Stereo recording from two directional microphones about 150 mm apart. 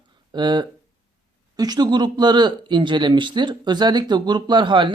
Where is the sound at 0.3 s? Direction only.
30° right (ahead or behind).